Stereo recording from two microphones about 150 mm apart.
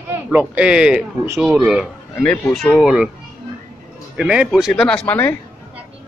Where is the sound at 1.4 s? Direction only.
5° right (ahead or behind).